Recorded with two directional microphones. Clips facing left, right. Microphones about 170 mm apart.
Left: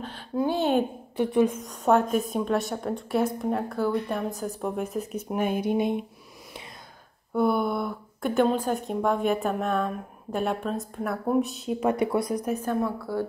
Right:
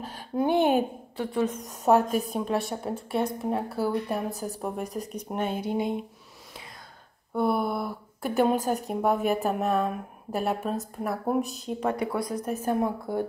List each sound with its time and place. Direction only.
0.4 s speech: 20° right (ahead or behind)
1.1 s a woman's voice: 15° left (ahead or behind)
1.6 s speech: 5° right (ahead or behind); by 6.0 s 20° left (ahead or behind)
7.3 s speech: centre (ahead or behind)
12.0 s a woman's voice: 20° left (ahead or behind)
12.6 s speech: 15° right (ahead or behind)